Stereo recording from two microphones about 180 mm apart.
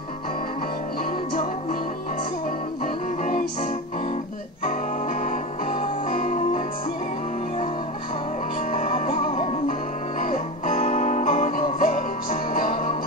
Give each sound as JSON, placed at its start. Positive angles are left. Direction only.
{"t": 2.8, "sound": "music", "side_deg": 45}
{"t": 5.2, "sound": "music", "side_deg": 45}
{"t": 8.7, "sound": "music", "side_deg": 40}